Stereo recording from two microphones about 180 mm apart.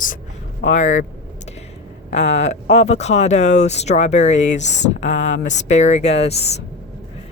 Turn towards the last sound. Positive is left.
turn(degrees=35)  # may be behind; listen again after turning